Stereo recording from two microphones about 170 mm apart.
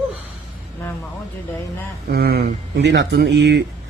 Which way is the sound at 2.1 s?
65° right (ahead or behind).